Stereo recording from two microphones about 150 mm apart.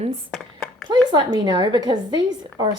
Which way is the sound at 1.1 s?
30° right (ahead or behind).